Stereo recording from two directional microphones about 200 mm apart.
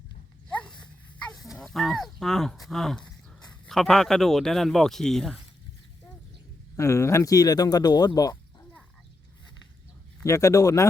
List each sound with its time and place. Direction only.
1.5 s speech: centre (ahead or behind)
6.7 s speech: 15° left (ahead or behind)
10.2 s speech: 15° left (ahead or behind)